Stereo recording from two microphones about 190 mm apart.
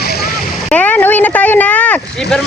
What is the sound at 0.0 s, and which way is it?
Splash, 55° left (ahead or behind).